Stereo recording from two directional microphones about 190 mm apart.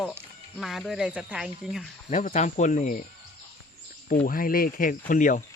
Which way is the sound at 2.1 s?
40° left (ahead or behind).